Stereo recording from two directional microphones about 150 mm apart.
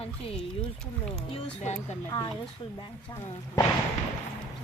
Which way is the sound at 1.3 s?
50° left (ahead or behind).